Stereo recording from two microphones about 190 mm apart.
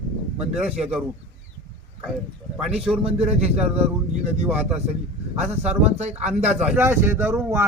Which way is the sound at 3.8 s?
35° right (ahead or behind).